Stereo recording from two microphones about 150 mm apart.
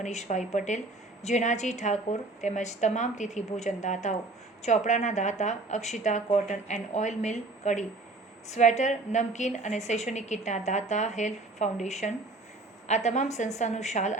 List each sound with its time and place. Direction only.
0.0 s speech: 50° left (ahead or behind)